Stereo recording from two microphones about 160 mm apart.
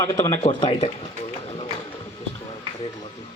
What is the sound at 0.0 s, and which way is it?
Speech, 20° left (ahead or behind).